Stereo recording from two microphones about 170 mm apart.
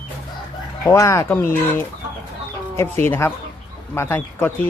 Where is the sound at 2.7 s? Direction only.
15° left (ahead or behind).